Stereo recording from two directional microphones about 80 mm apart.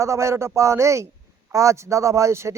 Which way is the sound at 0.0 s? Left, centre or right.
Right.